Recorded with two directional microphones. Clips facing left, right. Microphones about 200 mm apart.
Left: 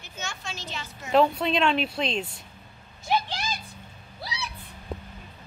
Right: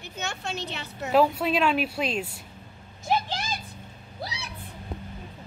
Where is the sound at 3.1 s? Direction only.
50° right (ahead or behind).